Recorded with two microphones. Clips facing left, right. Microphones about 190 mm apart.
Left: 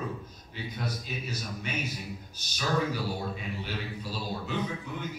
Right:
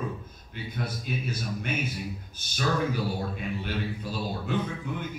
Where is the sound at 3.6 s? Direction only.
50° right (ahead or behind).